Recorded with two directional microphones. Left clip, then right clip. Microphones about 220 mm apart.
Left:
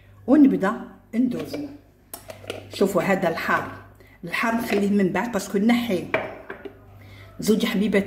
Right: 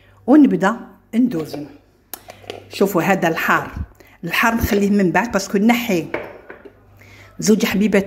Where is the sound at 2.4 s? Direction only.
40° right (ahead or behind).